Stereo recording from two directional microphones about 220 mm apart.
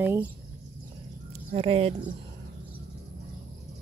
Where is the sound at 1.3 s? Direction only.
25° right (ahead or behind).